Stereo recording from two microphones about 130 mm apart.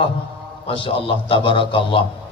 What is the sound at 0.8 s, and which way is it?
A man's voice, 45° left (ahead or behind).